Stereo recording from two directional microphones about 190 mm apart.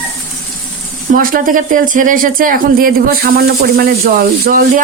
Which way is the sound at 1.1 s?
45° right (ahead or behind).